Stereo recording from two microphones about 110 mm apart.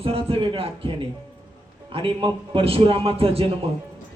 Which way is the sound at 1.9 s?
50° right (ahead or behind).